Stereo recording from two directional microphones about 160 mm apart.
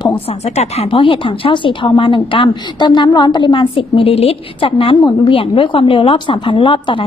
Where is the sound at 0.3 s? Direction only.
40° left (ahead or behind).